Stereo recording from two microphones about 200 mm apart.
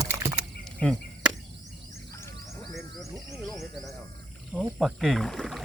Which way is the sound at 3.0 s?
Centre (ahead or behind).